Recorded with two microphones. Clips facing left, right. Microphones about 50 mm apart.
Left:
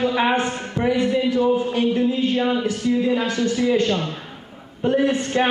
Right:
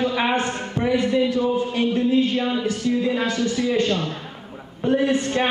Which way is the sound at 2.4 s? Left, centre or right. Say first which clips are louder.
Left 2 dB; centre.